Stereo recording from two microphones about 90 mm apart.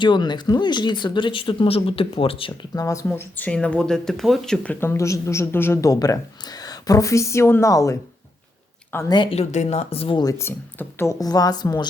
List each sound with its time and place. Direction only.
0.0 s speech: 55° left (ahead or behind); by 2.5 s 90° left
2.7 s speech: 40° left (ahead or behind)
3.1 s speech: 20° left (ahead or behind)
4.8 s speech: 30° left (ahead or behind)
5.8 s speech: 40° left (ahead or behind)
9.0 s speech: 65° left (ahead or behind)
9.9 s speech: 90° left
10.3 s speech: 25° left (ahead or behind); by 11.9 s 50° left (ahead or behind)